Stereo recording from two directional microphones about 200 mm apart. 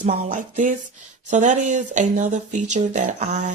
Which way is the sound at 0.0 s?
40° right (ahead or behind).